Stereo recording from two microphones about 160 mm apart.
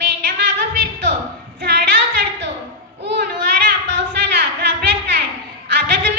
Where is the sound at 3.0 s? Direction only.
90° right.